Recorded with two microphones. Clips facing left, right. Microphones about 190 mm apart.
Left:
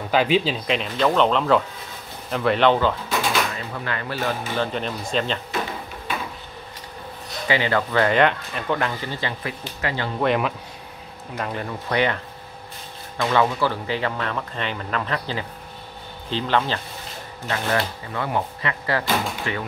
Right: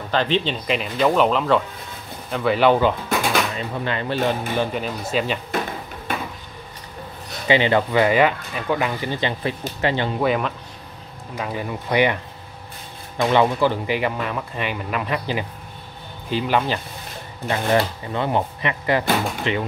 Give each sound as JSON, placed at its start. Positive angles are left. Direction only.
{"t": 0.1, "sound": "speech", "side_deg": 10}
{"t": 4.7, "sound": "speech", "side_deg": -5}
{"t": 7.4, "sound": "speech", "side_deg": -20}
{"t": 10.2, "sound": "speech", "side_deg": 0}
{"t": 13.2, "sound": "speech", "side_deg": -20}